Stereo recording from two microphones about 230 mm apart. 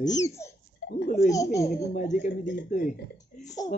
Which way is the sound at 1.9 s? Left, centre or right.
Left.